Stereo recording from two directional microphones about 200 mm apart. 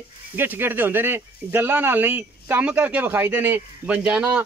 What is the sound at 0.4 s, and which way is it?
Speech, 10° right (ahead or behind).